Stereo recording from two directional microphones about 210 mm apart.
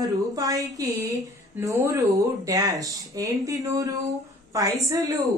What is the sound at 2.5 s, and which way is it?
Speech, 15° right (ahead or behind).